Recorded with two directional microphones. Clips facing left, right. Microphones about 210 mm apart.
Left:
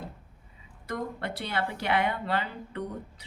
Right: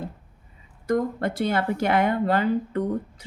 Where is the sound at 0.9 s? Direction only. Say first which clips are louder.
Right 10 dB; 45° right (ahead or behind).